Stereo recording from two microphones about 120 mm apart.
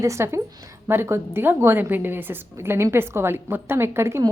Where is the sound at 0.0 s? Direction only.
25° right (ahead or behind).